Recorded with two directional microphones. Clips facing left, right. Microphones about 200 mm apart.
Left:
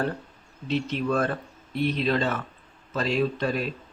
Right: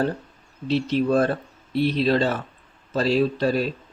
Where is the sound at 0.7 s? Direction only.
35° right (ahead or behind).